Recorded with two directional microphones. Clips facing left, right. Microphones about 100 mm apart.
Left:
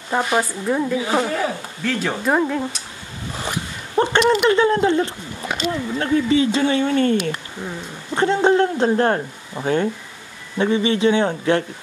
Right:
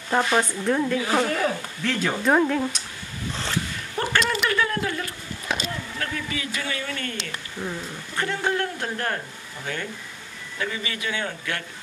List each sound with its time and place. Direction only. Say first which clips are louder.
0.4 s speech: left 2 dB; 10° left (ahead or behind)
1.9 s speech: left 2 dB; 5° left (ahead or behind)
3.3 s zipper: left 2 dB; 15° left (ahead or behind)
3.9 s speech: left 8 dB; 25° left (ahead or behind)